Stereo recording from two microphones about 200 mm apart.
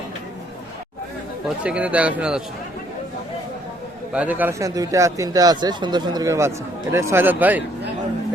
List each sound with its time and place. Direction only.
1.6 s speech: 5° right (ahead or behind)
4.1 s speech: 5° right (ahead or behind)